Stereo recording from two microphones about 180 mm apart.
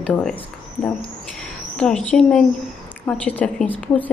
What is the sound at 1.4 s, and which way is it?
A woman's voice, 5° left (ahead or behind).